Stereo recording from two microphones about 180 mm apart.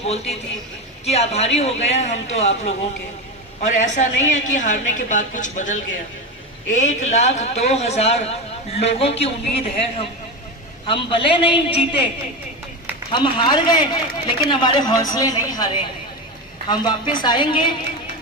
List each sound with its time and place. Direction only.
0.0 s a man's voice: 35° left (ahead or behind)
13.1 s a woman's voice: 25° left (ahead or behind)